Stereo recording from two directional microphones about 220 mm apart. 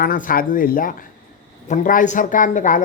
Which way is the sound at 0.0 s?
40° left (ahead or behind).